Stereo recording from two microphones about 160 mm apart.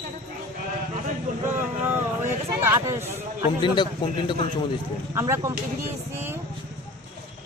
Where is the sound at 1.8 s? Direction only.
15° right (ahead or behind).